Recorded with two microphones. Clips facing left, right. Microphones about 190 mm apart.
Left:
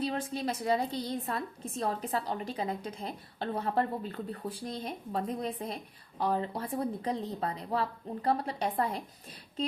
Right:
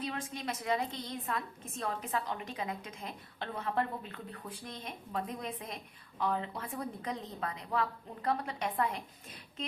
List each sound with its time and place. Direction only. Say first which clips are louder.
0.0 s a woman's voice: left 6 dB; 35° left (ahead or behind)